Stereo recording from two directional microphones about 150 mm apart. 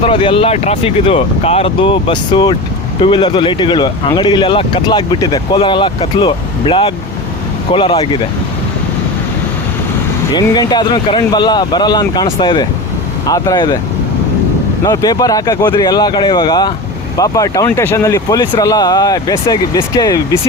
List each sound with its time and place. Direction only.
0.0 s speech: 35° left (ahead or behind)
10.5 s speech: 25° left (ahead or behind)
14.8 s speech: 25° left (ahead or behind)